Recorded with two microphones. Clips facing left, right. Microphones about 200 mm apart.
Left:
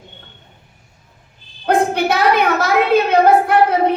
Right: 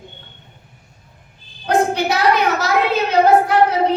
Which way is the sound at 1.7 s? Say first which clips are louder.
Left 1 dB; 55° left (ahead or behind).